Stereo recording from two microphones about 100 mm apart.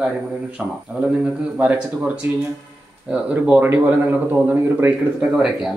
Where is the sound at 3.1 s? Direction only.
15° right (ahead or behind).